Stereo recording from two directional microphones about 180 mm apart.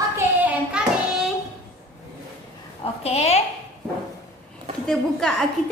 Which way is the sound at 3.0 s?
35° left (ahead or behind).